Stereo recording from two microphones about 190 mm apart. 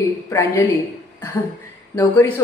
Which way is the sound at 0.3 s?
15° left (ahead or behind).